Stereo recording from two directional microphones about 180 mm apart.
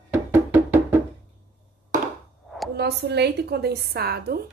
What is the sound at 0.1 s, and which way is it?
Music, 10° right (ahead or behind).